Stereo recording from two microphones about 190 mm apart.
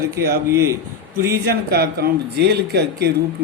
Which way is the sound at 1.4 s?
55° right (ahead or behind).